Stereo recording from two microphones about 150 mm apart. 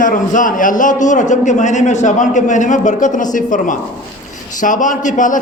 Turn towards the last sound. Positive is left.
turn(degrees=60)  # may be behind; listen again after turning